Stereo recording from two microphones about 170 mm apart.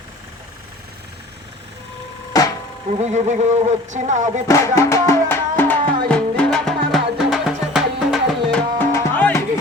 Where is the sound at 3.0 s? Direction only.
45° right (ahead or behind).